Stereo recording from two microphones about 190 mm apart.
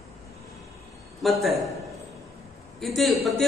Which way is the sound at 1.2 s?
Centre (ahead or behind).